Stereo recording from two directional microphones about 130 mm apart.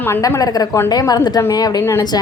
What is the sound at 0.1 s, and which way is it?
A woman's voice, 25° left (ahead or behind).